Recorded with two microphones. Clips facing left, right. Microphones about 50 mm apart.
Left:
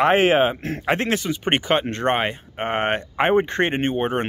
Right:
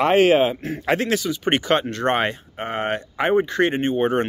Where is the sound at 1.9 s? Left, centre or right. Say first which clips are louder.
Even; left.